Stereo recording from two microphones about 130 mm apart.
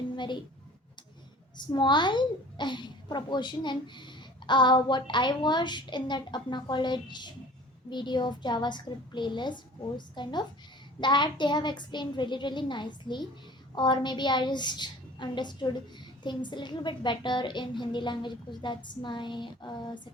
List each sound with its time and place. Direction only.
1.5 s a child's voice: 35° left (ahead or behind)